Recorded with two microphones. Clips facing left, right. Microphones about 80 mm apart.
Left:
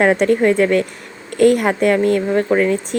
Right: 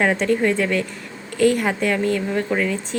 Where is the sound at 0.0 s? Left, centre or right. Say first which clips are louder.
Left 5 dB; left.